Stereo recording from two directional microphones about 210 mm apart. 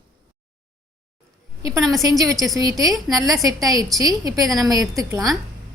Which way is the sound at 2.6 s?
15° right (ahead or behind).